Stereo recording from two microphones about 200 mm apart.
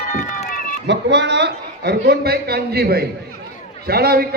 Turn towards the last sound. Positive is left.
turn(degrees=-55)  # may be behind; listen again after turning